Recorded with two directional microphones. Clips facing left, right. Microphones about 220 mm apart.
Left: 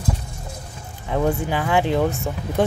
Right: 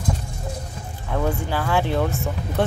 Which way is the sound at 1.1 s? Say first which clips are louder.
Left 3 dB; 15° left (ahead or behind).